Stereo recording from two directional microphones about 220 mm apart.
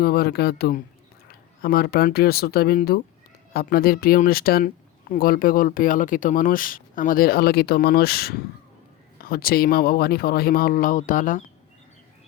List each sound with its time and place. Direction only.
0.0 s speech: 45° left (ahead or behind)